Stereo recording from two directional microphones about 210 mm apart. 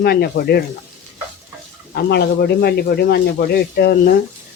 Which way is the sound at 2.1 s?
50° left (ahead or behind).